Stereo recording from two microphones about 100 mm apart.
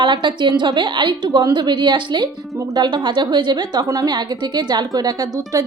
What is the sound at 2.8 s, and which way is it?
A woman's voice, 50° right (ahead or behind).